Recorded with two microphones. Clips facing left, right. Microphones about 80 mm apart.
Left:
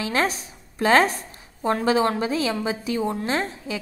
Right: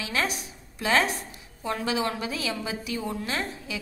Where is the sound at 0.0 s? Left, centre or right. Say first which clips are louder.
Left 5 dB; left.